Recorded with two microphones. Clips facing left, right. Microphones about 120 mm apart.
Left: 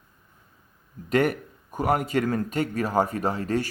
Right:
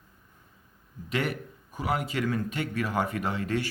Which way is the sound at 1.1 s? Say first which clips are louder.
Left 8 dB; 45° left (ahead or behind).